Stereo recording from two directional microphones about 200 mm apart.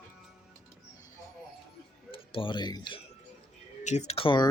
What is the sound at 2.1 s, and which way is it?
Speech, 25° left (ahead or behind).